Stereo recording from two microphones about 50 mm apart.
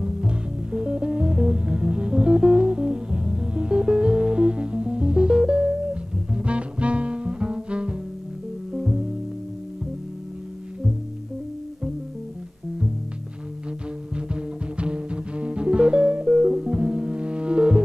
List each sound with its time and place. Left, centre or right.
0.0 s music: centre
14.1 s music: right